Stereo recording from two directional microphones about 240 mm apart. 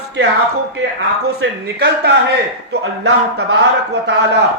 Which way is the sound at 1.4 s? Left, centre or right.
Right.